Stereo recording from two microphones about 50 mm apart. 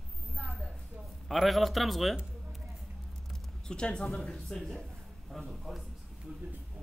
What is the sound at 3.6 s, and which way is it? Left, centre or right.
Speech, centre.